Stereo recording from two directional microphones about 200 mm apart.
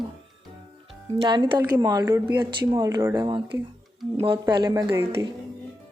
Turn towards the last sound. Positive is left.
turn(degrees=-15)  # may be behind; listen again after turning